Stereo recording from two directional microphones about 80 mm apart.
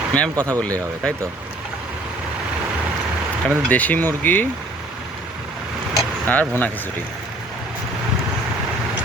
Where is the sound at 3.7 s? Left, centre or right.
Left.